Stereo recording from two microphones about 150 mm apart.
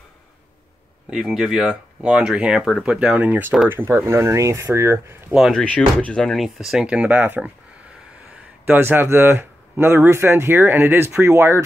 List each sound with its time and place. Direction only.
1.1 s speech: 5° right (ahead or behind)
5.3 s speech: centre (ahead or behind)
8.6 s speech: 15° right (ahead or behind)